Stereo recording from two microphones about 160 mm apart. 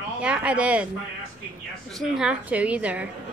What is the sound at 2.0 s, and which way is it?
A woman's voice, 5° right (ahead or behind).